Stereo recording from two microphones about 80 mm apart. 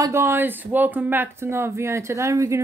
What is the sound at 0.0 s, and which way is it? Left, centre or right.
Speech, right.